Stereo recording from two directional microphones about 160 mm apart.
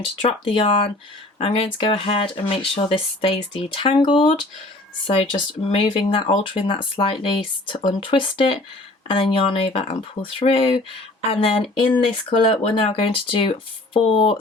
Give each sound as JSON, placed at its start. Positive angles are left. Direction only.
{"t": 0.2, "sound": "speech", "side_deg": 35}